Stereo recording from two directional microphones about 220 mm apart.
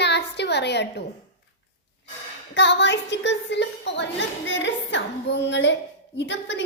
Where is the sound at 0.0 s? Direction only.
50° left (ahead or behind).